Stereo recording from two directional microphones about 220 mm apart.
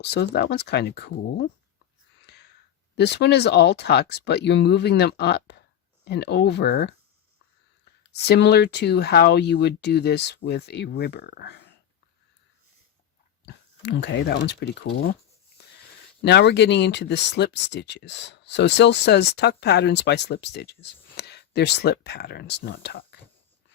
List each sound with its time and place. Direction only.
0.0 s speech: 50° left (ahead or behind)
2.2 s a sound: 50° left (ahead or behind)
2.9 s speech: 50° left (ahead or behind)
8.1 s speech: 50° left (ahead or behind)
13.5 s speech: 50° left (ahead or behind)
16.2 s speech: 50° left (ahead or behind)